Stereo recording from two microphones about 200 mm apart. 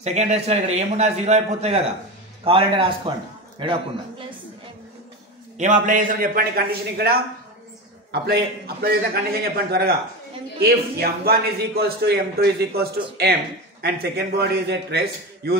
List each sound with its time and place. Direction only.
0.0 s a man's voice: 35° right (ahead or behind)
5.6 s speech: 40° right (ahead or behind); by 15.5 s 55° right (ahead or behind)